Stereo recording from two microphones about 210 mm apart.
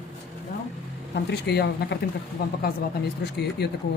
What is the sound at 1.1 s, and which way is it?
Speech, 55° left (ahead or behind).